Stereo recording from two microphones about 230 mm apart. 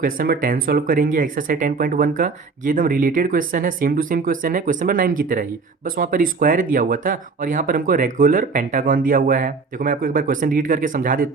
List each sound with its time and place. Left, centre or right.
0.0 s speech: right